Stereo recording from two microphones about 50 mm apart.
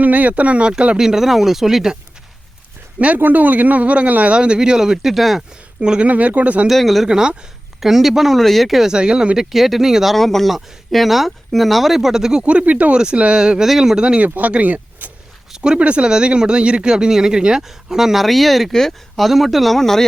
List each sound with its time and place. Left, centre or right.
0.0 s speech: right
0.9 s speech: centre
3.2 s speech: right
4.4 s speech: centre
5.8 s speech: centre
6.1 s speech: right
6.7 s speech: centre
7.1 s speech: centre
7.8 s speech: centre
8.9 s speech: centre
12.5 s speech: right
14.3 s speech: right
15.5 s speech: centre